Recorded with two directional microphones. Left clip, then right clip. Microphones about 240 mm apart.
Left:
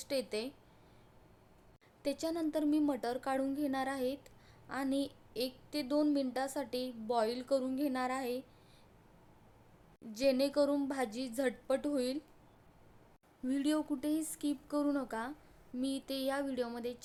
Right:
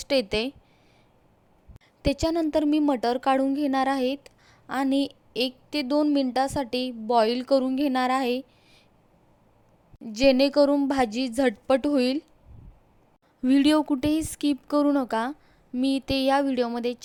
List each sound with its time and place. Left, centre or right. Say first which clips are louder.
0.0 s a woman's voice: right 13 dB; right
2.0 s a woman's voice: right 12 dB; right
10.1 s a woman's voice: right 12 dB; right
13.4 s a woman's voice: right 14 dB; right